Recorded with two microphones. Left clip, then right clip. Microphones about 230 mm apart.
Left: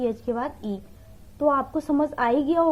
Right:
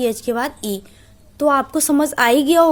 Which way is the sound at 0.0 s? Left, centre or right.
Right.